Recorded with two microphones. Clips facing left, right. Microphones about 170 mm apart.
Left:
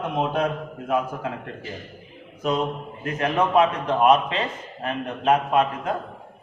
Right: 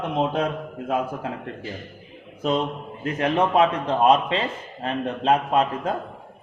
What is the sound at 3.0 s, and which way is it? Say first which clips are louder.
A man's voice: right 1 dB; 30° right (ahead or behind).